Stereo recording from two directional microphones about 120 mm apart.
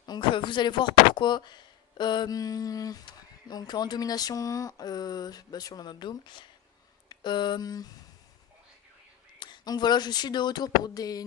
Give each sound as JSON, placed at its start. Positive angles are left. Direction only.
{"t": 0.0, "sound": "speech", "side_deg": 40}
{"t": 9.4, "sound": "speech", "side_deg": 40}